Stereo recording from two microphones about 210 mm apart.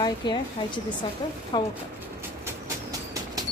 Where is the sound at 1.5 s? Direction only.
20° left (ahead or behind).